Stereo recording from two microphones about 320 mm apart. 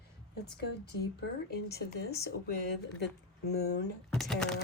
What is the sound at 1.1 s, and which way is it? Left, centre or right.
Speech, left.